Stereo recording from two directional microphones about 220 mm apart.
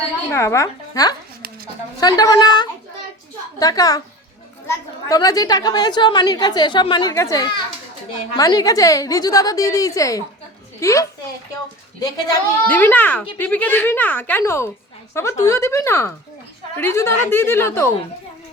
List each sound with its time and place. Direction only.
0.3 s a woman's voice: 10° left (ahead or behind)